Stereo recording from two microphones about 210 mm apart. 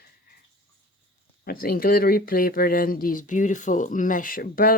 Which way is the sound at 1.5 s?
45° left (ahead or behind).